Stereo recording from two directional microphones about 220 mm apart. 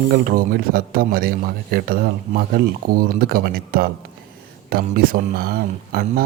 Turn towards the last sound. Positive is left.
turn(degrees=-45)  # may be behind; listen again after turning